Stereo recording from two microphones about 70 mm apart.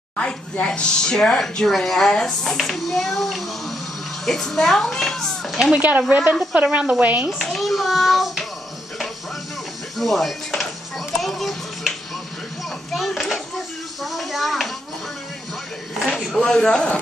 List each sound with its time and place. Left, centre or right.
0.2 s a child's voice: centre
5.8 s speech: right
7.4 s a child's voice: centre
9.9 s music: centre
12.9 s children playing: centre
14.1 s a sound: centre
16.0 s speech: centre